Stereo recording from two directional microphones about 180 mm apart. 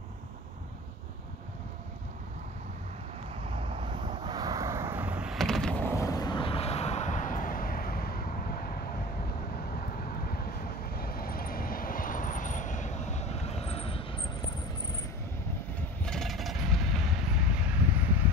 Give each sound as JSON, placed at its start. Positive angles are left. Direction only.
{"t": 3.5, "sound": "vehicle", "side_deg": -30}
{"t": 16.0, "sound": "vehicle", "side_deg": 5}